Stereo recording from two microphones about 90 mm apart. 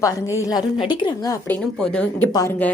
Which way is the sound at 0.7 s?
60° left (ahead or behind).